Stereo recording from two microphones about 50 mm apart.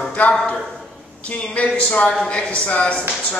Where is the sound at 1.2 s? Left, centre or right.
Left.